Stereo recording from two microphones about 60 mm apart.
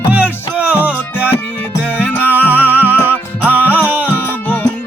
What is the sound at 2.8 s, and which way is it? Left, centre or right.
Music, right.